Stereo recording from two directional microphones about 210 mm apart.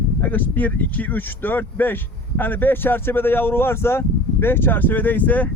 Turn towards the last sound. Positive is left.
turn(degrees=10)  # may be behind; listen again after turning